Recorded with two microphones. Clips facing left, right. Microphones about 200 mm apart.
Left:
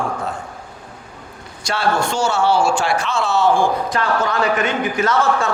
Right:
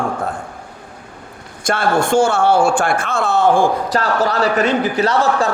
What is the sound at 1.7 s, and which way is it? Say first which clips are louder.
A man's voice: right 4 dB; 50° right (ahead or behind).